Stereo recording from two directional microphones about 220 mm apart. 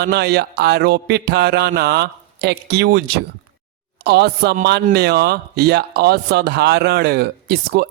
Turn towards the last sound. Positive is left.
turn(degrees=-45)  # may be behind; listen again after turning